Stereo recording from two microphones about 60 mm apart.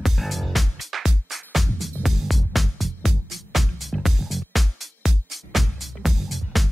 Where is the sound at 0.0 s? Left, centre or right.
Centre.